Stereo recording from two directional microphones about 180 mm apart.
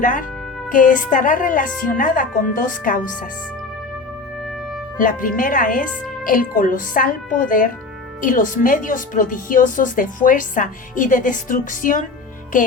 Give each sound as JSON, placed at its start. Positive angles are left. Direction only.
{"t": 0.0, "sound": "speech", "side_deg": 50}
{"t": 4.9, "sound": "speech", "side_deg": 50}